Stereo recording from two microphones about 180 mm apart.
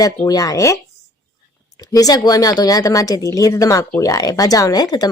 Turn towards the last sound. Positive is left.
turn(degrees=20)  # may be behind; listen again after turning